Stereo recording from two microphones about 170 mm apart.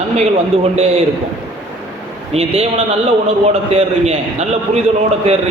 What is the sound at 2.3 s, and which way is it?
Speech, 35° right (ahead or behind).